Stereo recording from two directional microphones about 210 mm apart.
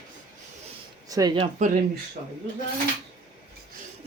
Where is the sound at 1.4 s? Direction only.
35° right (ahead or behind).